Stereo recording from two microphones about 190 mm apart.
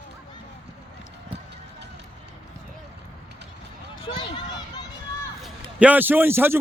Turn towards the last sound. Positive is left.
turn(degrees=-10)  # may be behind; listen again after turning